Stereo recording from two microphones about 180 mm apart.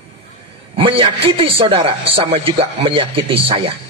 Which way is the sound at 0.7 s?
30° right (ahead or behind).